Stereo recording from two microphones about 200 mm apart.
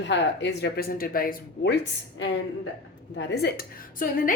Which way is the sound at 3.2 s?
55° left (ahead or behind).